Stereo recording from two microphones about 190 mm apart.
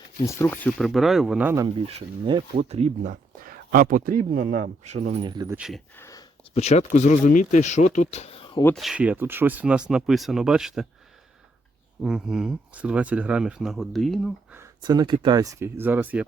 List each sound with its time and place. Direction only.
0.3 s speech: 15° left (ahead or behind); by 1.6 s 10° right (ahead or behind)
1.6 s speech: 25° right (ahead or behind)
5.5 s speech: centre (ahead or behind)
6.0 s a sound: 15° left (ahead or behind)
6.5 s speech: 35° left (ahead or behind)
8.6 s speech: centre (ahead or behind)
12.0 s speech: 5° right (ahead or behind)
14.5 s speech: 20° right (ahead or behind)